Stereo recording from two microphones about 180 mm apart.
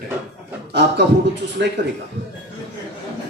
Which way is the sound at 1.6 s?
75° right (ahead or behind).